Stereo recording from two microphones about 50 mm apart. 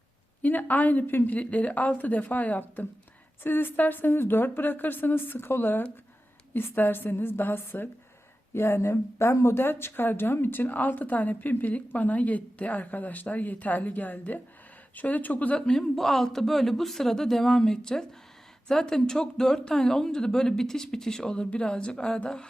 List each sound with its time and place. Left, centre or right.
0.4 s speech: left
1.3 s a woman's voice: left
8.5 s speech: left
15.5 s speech: centre
16.0 s speech: centre